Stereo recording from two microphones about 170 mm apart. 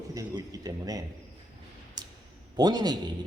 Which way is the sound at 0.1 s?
20° right (ahead or behind).